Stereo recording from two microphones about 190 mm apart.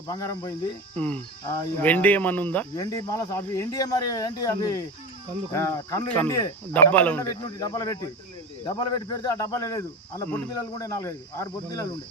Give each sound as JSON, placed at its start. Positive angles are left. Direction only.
{"t": 0.1, "sound": "speech", "side_deg": 20}
{"t": 0.9, "sound": "cricket", "side_deg": 10}
{"t": 2.8, "sound": "speech", "side_deg": 20}
{"t": 5.5, "sound": "cricket", "side_deg": 15}